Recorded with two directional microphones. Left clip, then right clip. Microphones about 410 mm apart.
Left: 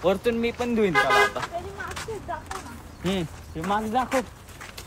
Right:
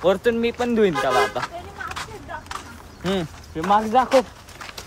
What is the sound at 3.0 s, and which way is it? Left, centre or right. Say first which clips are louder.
Speech: right 4 dB; centre.